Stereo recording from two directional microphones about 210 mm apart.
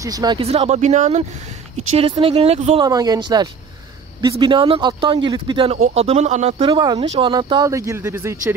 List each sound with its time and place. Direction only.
0.0 s speech: 20° right (ahead or behind)
6.7 s speech: 20° right (ahead or behind)